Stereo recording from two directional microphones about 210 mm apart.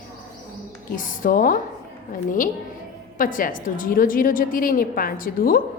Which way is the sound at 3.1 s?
40° left (ahead or behind).